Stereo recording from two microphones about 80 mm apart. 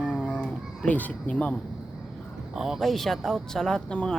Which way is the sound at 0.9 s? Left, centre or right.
Centre.